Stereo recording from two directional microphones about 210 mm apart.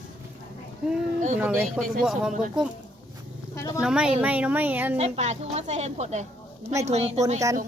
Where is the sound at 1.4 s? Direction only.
5° right (ahead or behind).